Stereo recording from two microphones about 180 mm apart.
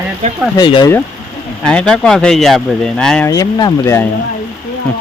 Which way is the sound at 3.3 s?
20° left (ahead or behind).